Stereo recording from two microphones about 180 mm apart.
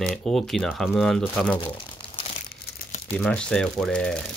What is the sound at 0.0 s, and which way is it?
Speech, centre (ahead or behind).